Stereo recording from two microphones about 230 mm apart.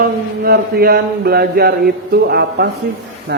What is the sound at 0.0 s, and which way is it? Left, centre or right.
Mantra, right.